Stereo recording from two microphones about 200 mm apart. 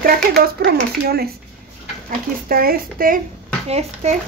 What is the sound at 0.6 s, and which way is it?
Speech, 50° right (ahead or behind).